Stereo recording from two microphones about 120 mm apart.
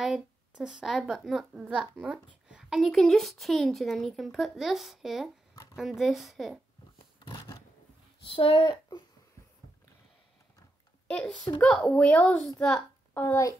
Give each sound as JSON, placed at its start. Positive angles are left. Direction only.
{"t": 0.0, "sound": "a woman's voice", "side_deg": -5}
{"t": 7.2, "sound": "a sound", "side_deg": 35}
{"t": 8.3, "sound": "speech", "side_deg": 50}
{"t": 11.1, "sound": "a child's voice", "side_deg": 5}